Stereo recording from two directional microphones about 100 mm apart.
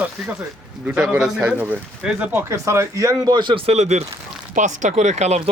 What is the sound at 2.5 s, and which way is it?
Speech, 30° right (ahead or behind).